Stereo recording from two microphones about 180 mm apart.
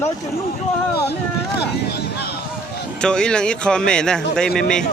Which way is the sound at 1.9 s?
60° left (ahead or behind).